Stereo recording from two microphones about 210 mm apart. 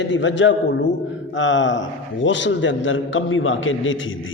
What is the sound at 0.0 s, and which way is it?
A man's voice, 60° left (ahead or behind).